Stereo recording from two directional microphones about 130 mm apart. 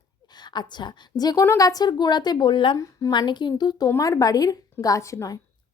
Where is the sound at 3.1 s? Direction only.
35° left (ahead or behind).